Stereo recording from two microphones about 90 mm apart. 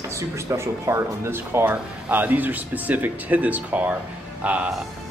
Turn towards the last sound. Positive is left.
turn(degrees=-15)  # may be behind; listen again after turning